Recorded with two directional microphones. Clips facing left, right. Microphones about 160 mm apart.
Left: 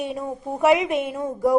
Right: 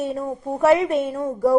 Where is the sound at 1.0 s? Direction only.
20° left (ahead or behind).